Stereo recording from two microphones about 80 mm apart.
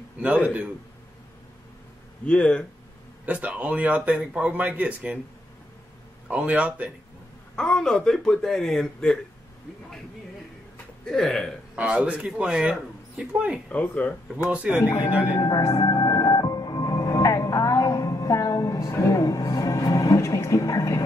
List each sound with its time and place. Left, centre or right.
2.2 s speech: centre
3.3 s speech: centre
6.2 s speech: centre
7.5 s speech: centre
11.1 s speech: centre
11.7 s speech: centre
13.3 s speech: centre
13.7 s speech: centre
14.5 s speech: centre
14.8 s speech: left
15.3 s speech: left
15.8 s music: left